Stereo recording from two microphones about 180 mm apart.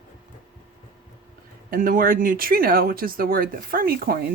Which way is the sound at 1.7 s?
50° right (ahead or behind).